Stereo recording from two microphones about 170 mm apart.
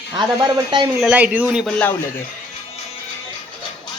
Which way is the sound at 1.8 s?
15° left (ahead or behind).